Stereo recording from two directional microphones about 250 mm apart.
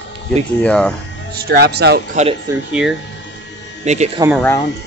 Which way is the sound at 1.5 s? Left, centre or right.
Right.